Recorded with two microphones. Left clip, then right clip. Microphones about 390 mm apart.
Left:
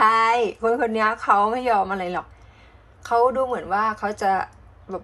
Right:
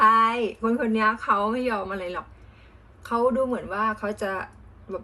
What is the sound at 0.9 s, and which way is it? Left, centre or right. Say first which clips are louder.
A woman's voice: left 3 dB; centre.